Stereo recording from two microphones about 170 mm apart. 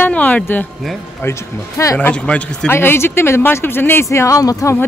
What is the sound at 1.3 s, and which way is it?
Speech, 15° left (ahead or behind).